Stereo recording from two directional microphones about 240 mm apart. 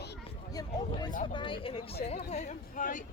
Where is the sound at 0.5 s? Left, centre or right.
Centre; by 3.0 s left.